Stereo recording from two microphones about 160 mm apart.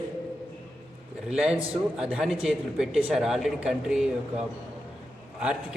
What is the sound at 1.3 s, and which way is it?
A man's voice, 5° right (ahead or behind).